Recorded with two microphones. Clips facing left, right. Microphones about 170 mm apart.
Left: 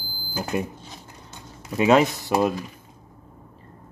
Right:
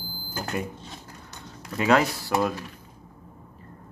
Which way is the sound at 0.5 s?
20° left (ahead or behind).